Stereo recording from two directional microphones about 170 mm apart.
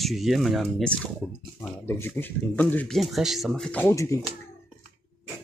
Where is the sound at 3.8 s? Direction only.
15° left (ahead or behind).